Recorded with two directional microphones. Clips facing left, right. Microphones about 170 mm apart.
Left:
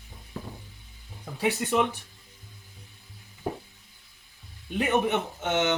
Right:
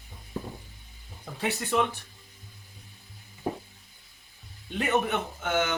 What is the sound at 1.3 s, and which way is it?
Speech, 15° left (ahead or behind).